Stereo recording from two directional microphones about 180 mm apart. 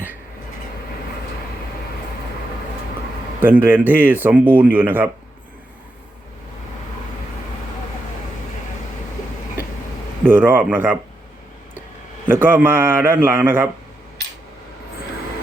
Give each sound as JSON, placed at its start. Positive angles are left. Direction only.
{"t": 3.4, "sound": "speech", "side_deg": -10}
{"t": 10.2, "sound": "speech", "side_deg": -10}
{"t": 12.2, "sound": "speech", "side_deg": -10}